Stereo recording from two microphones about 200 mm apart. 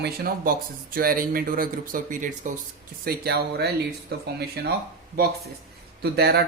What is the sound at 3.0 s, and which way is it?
Speech, 50° right (ahead or behind).